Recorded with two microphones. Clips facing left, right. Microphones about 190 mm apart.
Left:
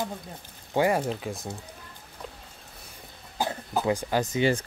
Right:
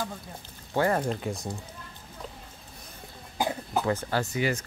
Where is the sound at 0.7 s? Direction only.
10° left (ahead or behind).